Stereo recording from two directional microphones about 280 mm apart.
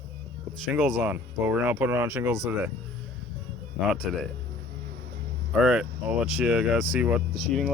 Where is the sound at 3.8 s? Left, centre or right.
Centre.